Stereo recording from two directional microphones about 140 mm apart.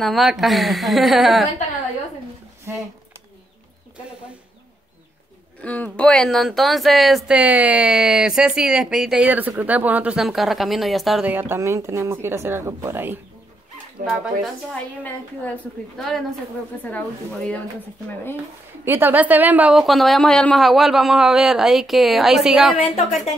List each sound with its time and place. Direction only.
0.0 s speech: centre (ahead or behind)
5.6 s speech: 10° left (ahead or behind)
11.3 s a woman's voice: 15° right (ahead or behind)
14.7 s a woman's voice: 10° left (ahead or behind)
18.9 s speech: 15° right (ahead or behind)